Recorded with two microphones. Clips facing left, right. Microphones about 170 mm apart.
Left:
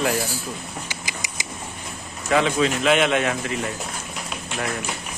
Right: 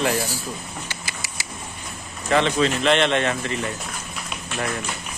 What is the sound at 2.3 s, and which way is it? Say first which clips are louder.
Speech: even; 5° left (ahead or behind).